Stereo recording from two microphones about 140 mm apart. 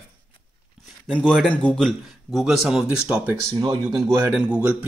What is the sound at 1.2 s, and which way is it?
Speech, 5° left (ahead or behind).